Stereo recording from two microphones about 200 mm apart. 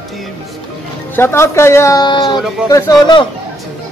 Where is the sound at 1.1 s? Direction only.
10° left (ahead or behind).